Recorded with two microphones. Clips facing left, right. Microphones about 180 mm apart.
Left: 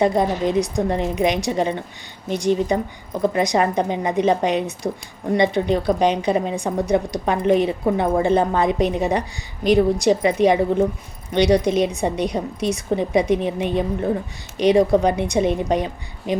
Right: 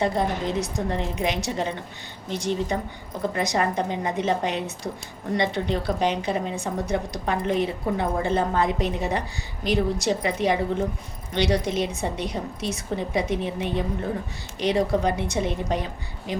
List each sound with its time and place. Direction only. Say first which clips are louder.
0.0 s a woman's voice: left 6 dB; 15° left (ahead or behind)